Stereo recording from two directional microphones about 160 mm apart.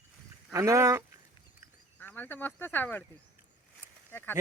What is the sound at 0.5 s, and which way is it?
Speech, 20° right (ahead or behind).